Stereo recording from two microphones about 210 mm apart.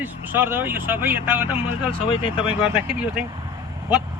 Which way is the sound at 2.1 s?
25° left (ahead or behind).